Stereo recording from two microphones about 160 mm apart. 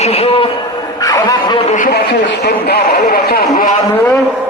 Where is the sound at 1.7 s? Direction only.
55° left (ahead or behind).